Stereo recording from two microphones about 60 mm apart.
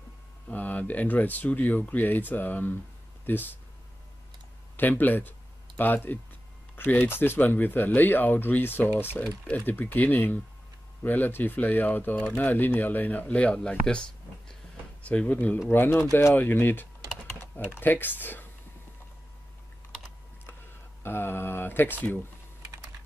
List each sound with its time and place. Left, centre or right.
0.5 s speech: left
4.7 s speech: left; by 14.0 s centre
15.0 s speech: left
21.0 s speech: left